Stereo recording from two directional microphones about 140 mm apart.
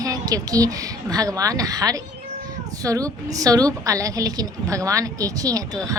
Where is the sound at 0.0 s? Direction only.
25° right (ahead or behind).